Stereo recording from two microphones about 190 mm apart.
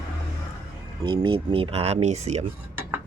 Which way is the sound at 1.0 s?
25° right (ahead or behind).